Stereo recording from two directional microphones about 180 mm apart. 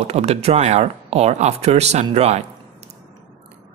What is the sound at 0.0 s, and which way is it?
Speech, 40° right (ahead or behind).